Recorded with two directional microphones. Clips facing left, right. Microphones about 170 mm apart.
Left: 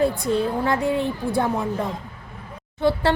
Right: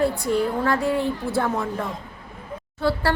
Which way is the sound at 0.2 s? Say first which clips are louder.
Even; 20° left (ahead or behind).